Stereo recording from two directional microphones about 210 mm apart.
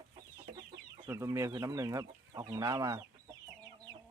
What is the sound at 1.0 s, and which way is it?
Speech, 10° right (ahead or behind).